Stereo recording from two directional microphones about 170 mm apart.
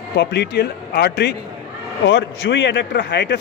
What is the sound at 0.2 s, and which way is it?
A man's voice, 80° left.